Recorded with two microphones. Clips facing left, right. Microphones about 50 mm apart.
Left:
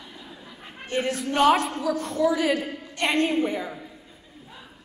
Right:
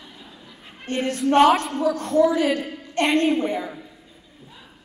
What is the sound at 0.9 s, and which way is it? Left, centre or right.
Speech, right.